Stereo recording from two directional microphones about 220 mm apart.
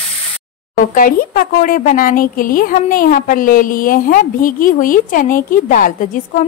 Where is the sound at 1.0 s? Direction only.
40° left (ahead or behind).